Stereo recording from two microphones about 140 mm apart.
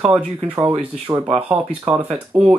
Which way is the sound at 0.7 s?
40° right (ahead or behind).